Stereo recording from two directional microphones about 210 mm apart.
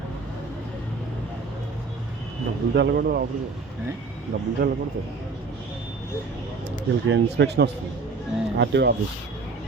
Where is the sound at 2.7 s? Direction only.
55° right (ahead or behind).